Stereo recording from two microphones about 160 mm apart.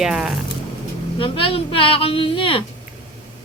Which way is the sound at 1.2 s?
35° left (ahead or behind).